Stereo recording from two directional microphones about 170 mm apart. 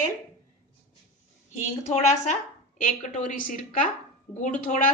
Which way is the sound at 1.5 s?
40° left (ahead or behind).